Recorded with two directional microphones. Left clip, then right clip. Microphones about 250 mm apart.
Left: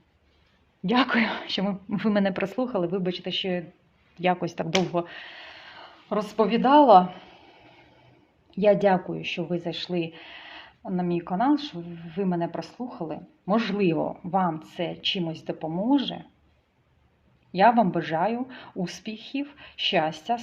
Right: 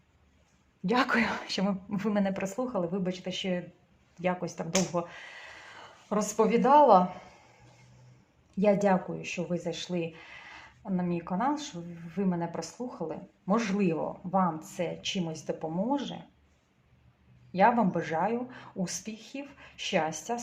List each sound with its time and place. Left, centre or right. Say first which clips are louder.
0.9 s speech: left 3 dB; left
8.4 s speech: left 5 dB; left
17.5 s speech: left 5 dB; left